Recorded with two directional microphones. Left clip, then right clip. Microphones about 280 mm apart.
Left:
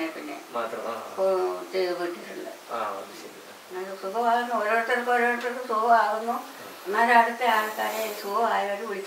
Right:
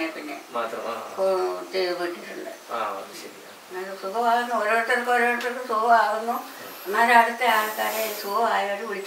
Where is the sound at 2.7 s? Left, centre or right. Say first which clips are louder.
Right 2 dB; centre.